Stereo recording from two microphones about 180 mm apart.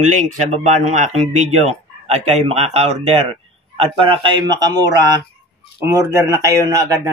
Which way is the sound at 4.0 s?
25° right (ahead or behind).